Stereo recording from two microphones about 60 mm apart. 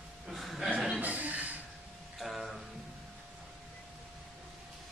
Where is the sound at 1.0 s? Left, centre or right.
Right.